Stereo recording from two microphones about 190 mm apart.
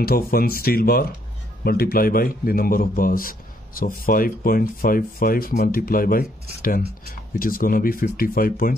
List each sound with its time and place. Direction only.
0.0 s a man's voice: 50° left (ahead or behind)